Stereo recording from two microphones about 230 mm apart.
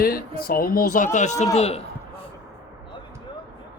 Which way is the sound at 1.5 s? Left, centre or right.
Left.